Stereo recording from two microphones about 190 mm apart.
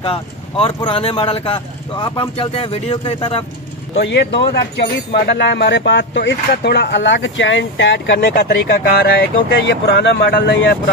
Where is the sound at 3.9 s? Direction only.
65° left (ahead or behind).